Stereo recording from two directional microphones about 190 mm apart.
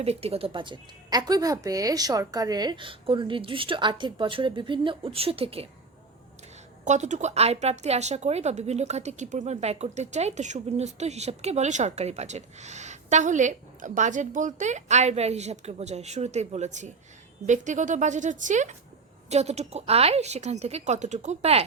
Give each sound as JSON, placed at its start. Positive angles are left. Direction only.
{"t": 0.0, "sound": "a woman's voice", "side_deg": -30}
{"t": 6.8, "sound": "speech", "side_deg": -40}